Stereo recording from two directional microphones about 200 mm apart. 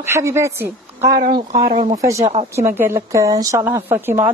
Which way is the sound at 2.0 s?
15° right (ahead or behind).